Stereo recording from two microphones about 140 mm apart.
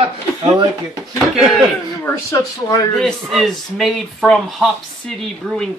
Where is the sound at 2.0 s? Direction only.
20° left (ahead or behind).